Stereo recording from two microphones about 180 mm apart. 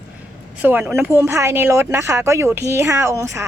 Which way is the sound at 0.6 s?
10° right (ahead or behind).